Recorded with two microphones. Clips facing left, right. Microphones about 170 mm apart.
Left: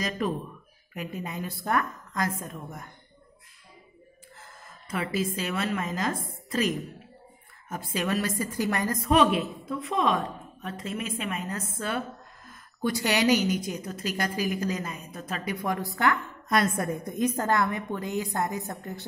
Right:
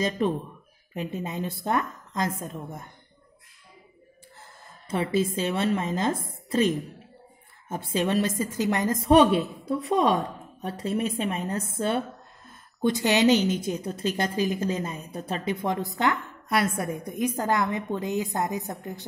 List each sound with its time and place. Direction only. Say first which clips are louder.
0.2 s a woman's voice: right 3 dB; 25° right (ahead or behind)
4.4 s a woman's voice: even; 30° right (ahead or behind)
16.4 s a woman's voice: even; 10° right (ahead or behind)